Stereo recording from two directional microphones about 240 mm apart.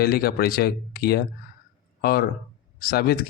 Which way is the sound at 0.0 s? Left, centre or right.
Left.